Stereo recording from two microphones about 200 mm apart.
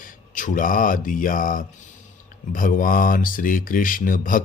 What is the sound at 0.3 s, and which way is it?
Speech, 40° left (ahead or behind).